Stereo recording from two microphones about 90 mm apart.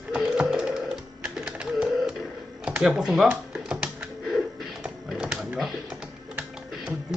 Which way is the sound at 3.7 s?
20° right (ahead or behind).